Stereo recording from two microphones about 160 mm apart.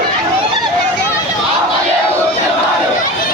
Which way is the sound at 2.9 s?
60° left (ahead or behind).